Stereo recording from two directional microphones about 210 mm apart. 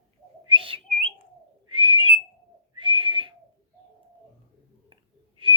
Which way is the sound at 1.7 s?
25° right (ahead or behind).